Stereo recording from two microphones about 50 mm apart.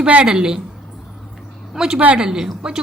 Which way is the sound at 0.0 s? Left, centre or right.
Right.